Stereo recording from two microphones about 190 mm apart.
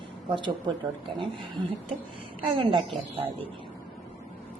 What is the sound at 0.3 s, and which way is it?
Speech, 25° right (ahead or behind).